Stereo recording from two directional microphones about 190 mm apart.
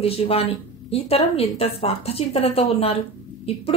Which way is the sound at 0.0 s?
30° left (ahead or behind).